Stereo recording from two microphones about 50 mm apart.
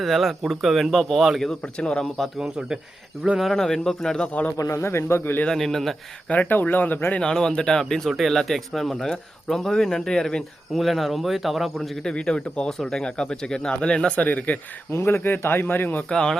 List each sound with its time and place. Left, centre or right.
0.0 s speech: centre
1.8 s speech: left
2.4 s speech: centre
3.5 s speech: centre
4.5 s a man's voice: left
5.5 s speech: centre
6.3 s speech: left
7.2 s speech: centre
10.8 s speech: centre
11.8 s speech: centre
14.2 s speech: left
14.8 s speech: left
16.0 s speech: centre